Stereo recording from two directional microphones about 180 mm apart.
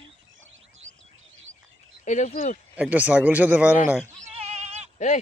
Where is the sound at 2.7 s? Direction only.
10° right (ahead or behind).